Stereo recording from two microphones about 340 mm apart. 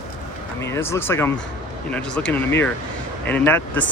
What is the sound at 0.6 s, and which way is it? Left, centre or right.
Speech, centre.